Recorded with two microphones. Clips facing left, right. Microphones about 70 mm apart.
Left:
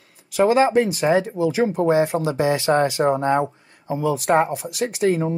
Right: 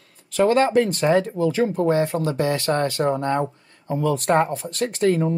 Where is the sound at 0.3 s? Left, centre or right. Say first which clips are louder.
Left 1 dB; centre.